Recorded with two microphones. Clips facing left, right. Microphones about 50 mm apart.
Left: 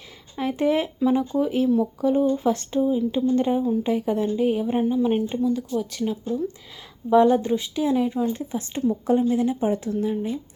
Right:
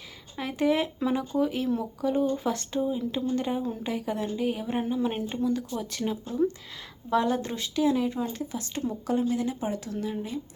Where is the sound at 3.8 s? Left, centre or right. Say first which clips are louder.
Left 7 dB; left.